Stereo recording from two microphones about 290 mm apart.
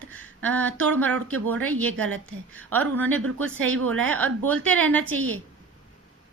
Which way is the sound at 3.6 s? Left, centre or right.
Right.